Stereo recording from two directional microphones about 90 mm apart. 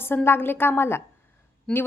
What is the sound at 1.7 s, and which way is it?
Speech, 5° left (ahead or behind).